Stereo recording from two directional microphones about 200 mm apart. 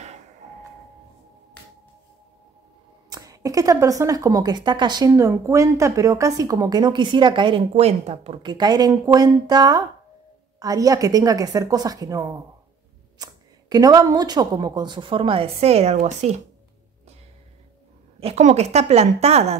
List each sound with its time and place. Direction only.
3.1 s a woman's voice: 15° right (ahead or behind); by 16.3 s 35° right (ahead or behind)
18.2 s a woman's voice: 35° right (ahead or behind)